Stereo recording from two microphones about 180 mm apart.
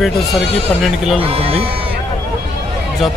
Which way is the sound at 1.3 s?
35° right (ahead or behind).